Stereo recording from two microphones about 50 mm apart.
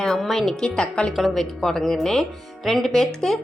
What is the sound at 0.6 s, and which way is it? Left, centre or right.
Speech, centre.